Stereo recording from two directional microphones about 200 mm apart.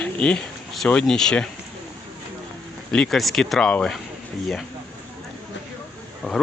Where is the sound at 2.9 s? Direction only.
5° left (ahead or behind).